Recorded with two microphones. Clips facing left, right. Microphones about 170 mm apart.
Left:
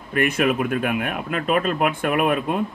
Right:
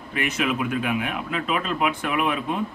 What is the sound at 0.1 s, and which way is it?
Speech, 50° left (ahead or behind).